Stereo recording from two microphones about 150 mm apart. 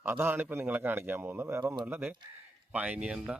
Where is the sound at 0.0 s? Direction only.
15° right (ahead or behind).